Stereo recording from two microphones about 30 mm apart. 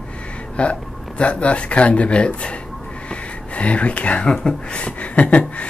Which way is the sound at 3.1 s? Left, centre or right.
Left.